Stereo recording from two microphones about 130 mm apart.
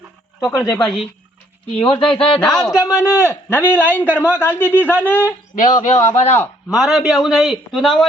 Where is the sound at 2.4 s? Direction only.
5° left (ahead or behind).